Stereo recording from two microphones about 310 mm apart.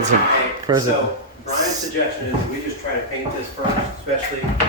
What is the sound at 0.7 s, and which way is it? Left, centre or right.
Speech, centre.